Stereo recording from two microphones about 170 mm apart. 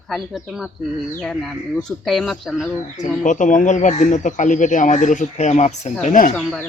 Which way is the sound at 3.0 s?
45° left (ahead or behind).